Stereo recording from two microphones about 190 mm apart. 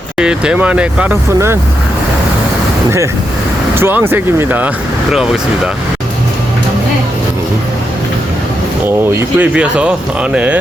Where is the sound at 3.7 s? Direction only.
10° right (ahead or behind).